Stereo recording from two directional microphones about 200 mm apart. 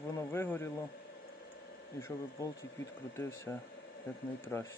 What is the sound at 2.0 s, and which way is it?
A man's voice, 10° left (ahead or behind).